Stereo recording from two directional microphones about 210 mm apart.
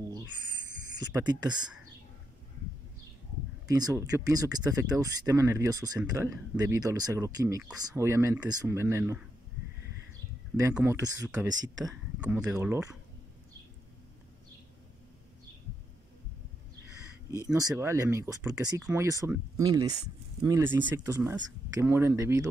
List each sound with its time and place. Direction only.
0.0 s owl: 15° right (ahead or behind)
0.9 s speech: 20° right (ahead or behind)
3.6 s speech: 15° right (ahead or behind)
10.7 s speech: 10° right (ahead or behind)
17.5 s speech: 15° right (ahead or behind)